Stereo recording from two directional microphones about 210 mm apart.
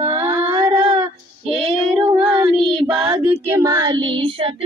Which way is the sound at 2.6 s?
25° right (ahead or behind).